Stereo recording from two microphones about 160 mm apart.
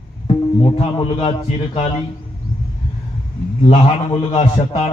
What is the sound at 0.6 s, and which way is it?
A man's voice, 30° left (ahead or behind).